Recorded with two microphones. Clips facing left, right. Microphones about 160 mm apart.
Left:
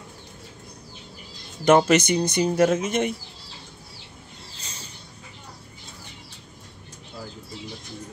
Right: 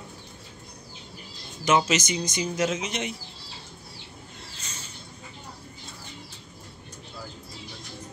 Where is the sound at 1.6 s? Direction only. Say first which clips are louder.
Left 6 dB; 60° left (ahead or behind).